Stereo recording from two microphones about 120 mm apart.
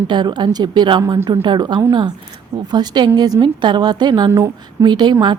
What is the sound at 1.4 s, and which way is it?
A woman's voice, 40° right (ahead or behind).